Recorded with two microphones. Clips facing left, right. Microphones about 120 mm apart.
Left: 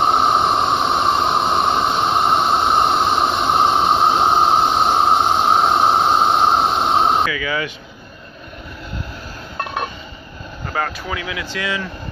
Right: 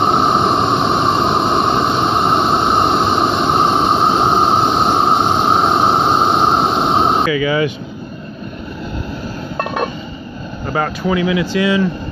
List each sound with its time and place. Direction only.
0.0 s a sound: 5° left (ahead or behind)
7.2 s vehicle: 20° right (ahead or behind)
11.0 s speech: 5° right (ahead or behind)